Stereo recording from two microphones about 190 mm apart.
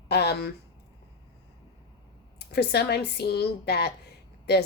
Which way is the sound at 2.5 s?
60° left (ahead or behind).